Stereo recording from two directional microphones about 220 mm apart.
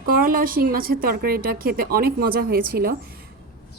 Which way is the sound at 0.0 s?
40° right (ahead or behind).